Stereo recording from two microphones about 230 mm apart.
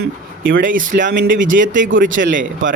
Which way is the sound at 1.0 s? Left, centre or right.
Right.